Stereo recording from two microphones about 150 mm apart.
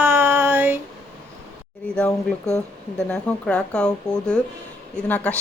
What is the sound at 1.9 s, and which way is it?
Speech, 10° left (ahead or behind).